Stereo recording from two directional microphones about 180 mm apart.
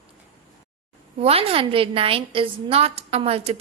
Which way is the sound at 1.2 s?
30° right (ahead or behind).